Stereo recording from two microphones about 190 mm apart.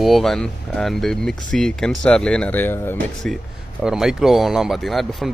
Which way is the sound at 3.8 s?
5° right (ahead or behind).